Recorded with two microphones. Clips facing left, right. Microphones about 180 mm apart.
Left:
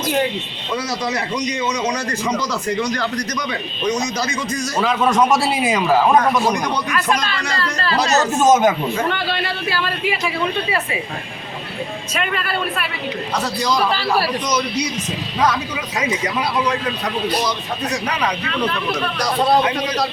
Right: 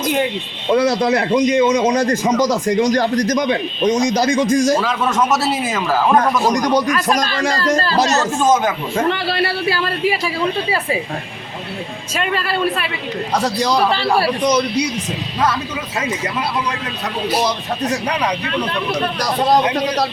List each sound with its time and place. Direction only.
0.7 s a man's voice: 60° right (ahead or behind)
5.1 s speech: 5° right (ahead or behind)
6.5 s speech: 40° right (ahead or behind)
8.2 s speech: 20° left (ahead or behind)
9.0 s speech: 35° right (ahead or behind)
12.1 s a man's voice: 30° right (ahead or behind)